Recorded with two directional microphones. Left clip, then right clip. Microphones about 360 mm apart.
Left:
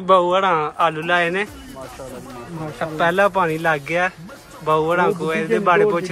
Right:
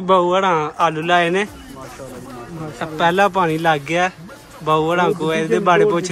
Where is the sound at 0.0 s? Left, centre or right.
Centre.